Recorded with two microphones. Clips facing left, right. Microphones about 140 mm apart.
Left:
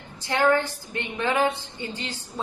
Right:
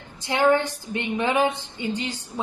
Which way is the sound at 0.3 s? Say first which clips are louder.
Right 2 dB; 20° right (ahead or behind).